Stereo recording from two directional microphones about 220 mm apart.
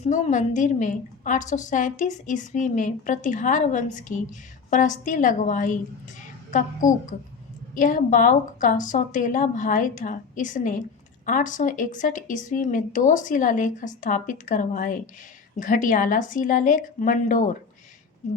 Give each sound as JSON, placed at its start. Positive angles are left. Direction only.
{"t": 0.0, "sound": "a woman's voice", "side_deg": 35}